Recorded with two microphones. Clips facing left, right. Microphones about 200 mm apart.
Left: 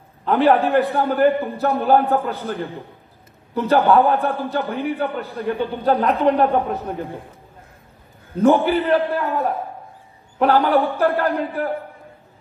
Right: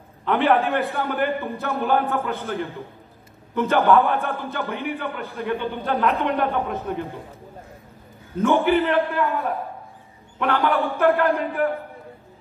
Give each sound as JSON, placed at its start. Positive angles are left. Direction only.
{"t": 0.2, "sound": "a man's voice", "side_deg": 40}
{"t": 3.5, "sound": "a man's voice", "side_deg": 35}
{"t": 8.4, "sound": "a man's voice", "side_deg": 35}